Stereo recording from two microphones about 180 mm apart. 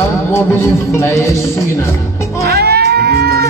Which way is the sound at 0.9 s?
15° left (ahead or behind).